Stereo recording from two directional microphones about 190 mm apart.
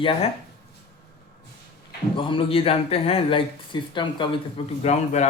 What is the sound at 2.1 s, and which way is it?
Speech, 25° left (ahead or behind).